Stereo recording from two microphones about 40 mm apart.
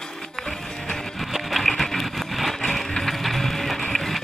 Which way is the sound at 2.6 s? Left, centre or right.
Centre.